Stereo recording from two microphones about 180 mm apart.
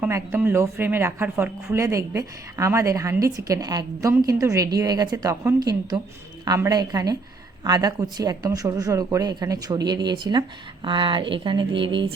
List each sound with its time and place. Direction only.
0.0 s speech: 10° right (ahead or behind); by 12.0 s 30° right (ahead or behind)